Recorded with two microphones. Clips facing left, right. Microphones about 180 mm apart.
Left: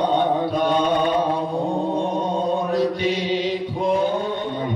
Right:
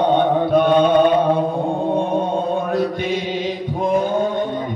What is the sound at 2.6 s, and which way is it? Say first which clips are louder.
Chant: even; 55° right (ahead or behind).